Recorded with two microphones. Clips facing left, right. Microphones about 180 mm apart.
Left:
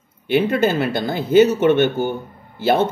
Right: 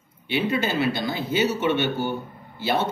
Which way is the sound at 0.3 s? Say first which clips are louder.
Left 7 dB; 50° left (ahead or behind).